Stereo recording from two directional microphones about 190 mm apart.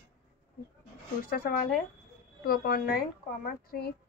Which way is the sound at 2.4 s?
50° left (ahead or behind).